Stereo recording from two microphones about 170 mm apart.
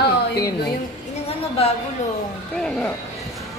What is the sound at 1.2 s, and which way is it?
Speech, 35° left (ahead or behind).